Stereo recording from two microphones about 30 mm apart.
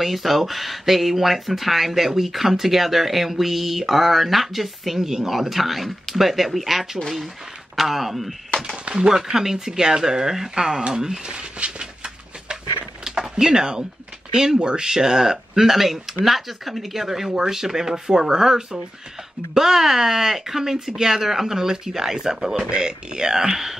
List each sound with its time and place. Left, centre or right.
0.0 s speech: centre
8.9 s speech: right
11.6 s a sound: right
13.0 s a sound: centre
14.3 s speech: centre
14.6 s speech: right